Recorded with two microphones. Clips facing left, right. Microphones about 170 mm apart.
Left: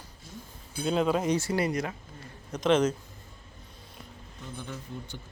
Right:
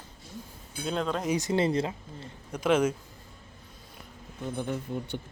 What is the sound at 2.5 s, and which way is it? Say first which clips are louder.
Speech: left 1 dB; 10° right (ahead or behind).